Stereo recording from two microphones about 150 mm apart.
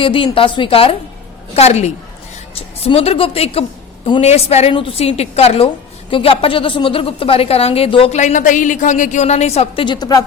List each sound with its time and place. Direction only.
0.0 s a woman's voice: 35° left (ahead or behind)
8.2 s a woman's voice: 55° left (ahead or behind)
9.8 s a woman's voice: 30° left (ahead or behind)